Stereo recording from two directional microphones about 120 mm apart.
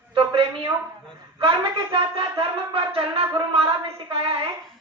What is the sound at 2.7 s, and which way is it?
Speech, 50° right (ahead or behind).